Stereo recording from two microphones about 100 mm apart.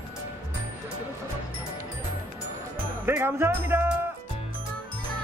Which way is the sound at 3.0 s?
25° right (ahead or behind).